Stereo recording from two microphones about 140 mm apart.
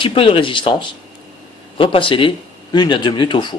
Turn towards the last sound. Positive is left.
turn(degrees=35)  # may be behind; listen again after turning